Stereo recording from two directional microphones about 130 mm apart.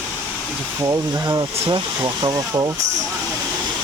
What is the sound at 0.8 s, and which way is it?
Speech, 25° right (ahead or behind).